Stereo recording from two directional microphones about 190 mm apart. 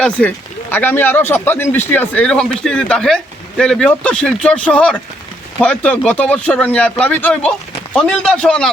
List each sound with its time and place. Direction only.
0.0 s speech: 10° left (ahead or behind)